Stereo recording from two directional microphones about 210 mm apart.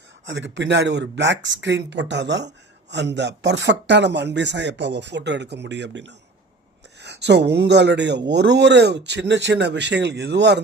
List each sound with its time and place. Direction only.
0.3 s speech: 60° right (ahead or behind)